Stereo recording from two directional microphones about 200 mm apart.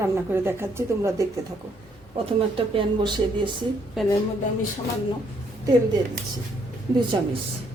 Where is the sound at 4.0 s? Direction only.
Centre (ahead or behind).